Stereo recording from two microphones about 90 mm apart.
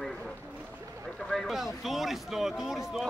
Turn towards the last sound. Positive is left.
turn(degrees=-5)  # may be behind; listen again after turning